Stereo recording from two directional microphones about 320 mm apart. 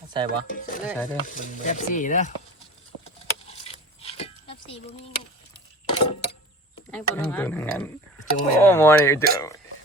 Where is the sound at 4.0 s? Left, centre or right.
Centre.